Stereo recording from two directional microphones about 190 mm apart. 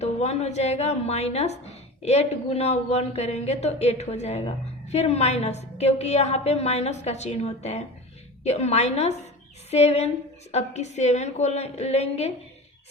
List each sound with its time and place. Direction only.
0.0 s a woman's voice: 35° left (ahead or behind)